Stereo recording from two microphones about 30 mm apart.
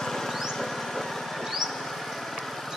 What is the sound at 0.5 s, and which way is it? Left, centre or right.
Lawn mower, centre.